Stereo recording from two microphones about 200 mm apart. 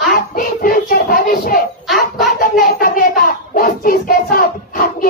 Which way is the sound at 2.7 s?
45° left (ahead or behind).